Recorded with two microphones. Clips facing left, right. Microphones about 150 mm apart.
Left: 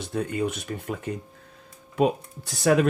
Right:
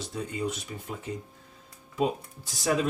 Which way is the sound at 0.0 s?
60° left (ahead or behind).